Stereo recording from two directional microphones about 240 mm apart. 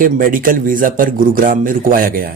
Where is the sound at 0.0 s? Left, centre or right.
Right.